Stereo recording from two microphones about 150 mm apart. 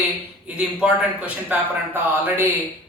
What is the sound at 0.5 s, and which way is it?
Speech, 10° right (ahead or behind).